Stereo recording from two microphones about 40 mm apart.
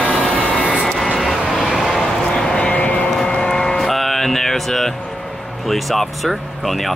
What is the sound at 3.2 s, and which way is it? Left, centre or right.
Vehicle, centre.